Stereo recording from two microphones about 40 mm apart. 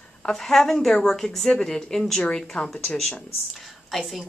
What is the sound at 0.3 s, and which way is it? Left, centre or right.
A woman's voice, centre.